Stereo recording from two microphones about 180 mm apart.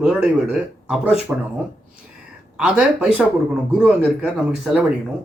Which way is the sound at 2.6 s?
5° right (ahead or behind).